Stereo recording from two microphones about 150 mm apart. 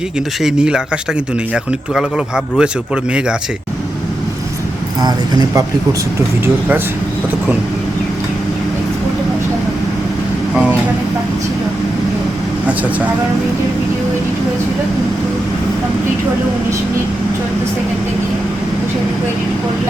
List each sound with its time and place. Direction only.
0.4 s speech: 5° right (ahead or behind)
5.0 s speech: 25° right (ahead or behind)
6.4 s speech: 15° right (ahead or behind)